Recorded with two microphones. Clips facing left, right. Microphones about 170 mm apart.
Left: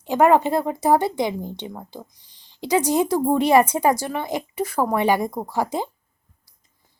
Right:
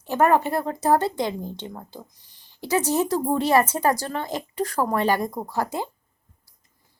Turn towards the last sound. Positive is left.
turn(degrees=15)  # may be behind; listen again after turning